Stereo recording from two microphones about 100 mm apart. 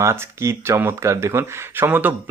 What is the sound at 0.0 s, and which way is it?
Speech, 25° right (ahead or behind).